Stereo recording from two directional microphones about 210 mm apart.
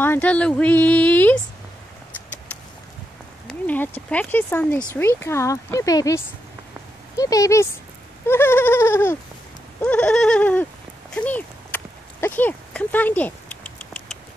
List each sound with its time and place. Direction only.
0.0 s speech: 10° left (ahead or behind)
3.4 s speech: 5° left (ahead or behind)
9.8 s goat: 5° left (ahead or behind)
11.1 s a sound: 10° left (ahead or behind)